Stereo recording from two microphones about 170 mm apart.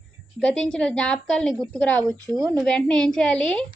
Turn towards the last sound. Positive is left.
turn(degrees=5)  # may be behind; listen again after turning